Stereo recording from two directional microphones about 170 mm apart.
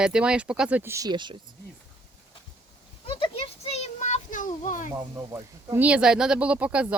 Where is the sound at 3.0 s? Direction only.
35° left (ahead or behind); by 4.8 s 50° left (ahead or behind).